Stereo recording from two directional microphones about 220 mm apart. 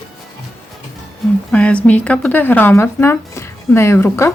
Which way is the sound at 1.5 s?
5° left (ahead or behind).